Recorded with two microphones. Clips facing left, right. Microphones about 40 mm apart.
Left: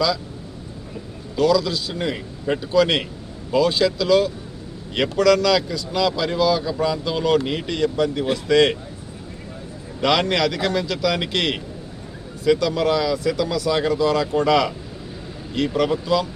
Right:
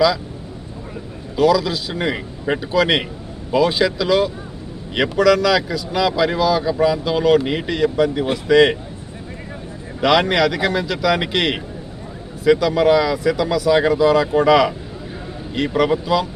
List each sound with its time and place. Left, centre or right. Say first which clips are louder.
1.4 s speech: right 3 dB; centre
10.0 s speech: right 4 dB; centre